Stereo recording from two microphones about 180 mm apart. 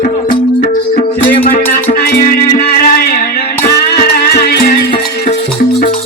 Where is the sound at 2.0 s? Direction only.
60° left (ahead or behind).